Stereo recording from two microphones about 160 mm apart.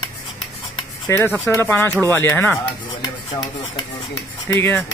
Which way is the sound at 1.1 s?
15° left (ahead or behind).